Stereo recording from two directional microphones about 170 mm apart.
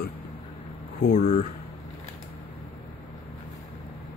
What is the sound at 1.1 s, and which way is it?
Speech, 45° left (ahead or behind).